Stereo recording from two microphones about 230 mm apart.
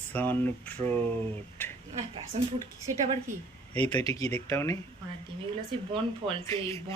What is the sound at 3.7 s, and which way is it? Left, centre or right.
Speech, centre.